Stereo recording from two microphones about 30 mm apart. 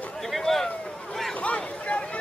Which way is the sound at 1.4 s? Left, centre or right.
Left.